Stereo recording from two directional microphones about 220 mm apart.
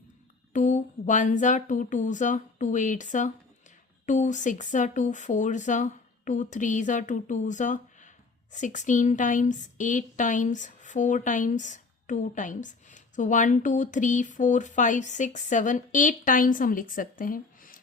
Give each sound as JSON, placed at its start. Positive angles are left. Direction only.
{"t": 0.5, "sound": "speech", "side_deg": 35}